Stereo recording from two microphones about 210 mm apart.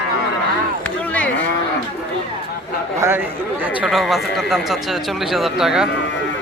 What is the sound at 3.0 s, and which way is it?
Speech, 10° right (ahead or behind).